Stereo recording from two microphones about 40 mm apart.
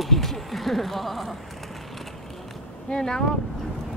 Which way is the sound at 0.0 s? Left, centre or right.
Centre.